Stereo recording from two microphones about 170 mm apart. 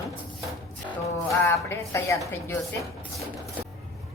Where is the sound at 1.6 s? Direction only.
15° left (ahead or behind).